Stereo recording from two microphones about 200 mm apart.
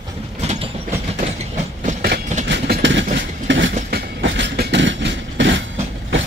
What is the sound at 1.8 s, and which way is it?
Train, 50° right (ahead or behind).